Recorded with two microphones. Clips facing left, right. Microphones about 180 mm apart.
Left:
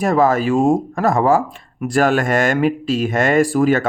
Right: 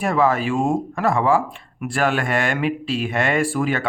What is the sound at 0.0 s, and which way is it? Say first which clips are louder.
Speech: left 4 dB; 40° left (ahead or behind).